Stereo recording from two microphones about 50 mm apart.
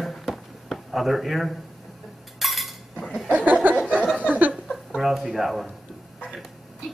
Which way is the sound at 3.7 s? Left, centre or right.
Right.